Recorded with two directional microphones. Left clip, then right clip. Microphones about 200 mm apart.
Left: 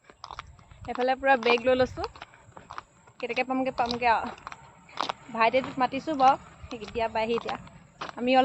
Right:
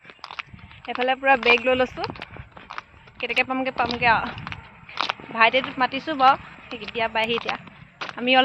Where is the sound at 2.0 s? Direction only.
10° left (ahead or behind).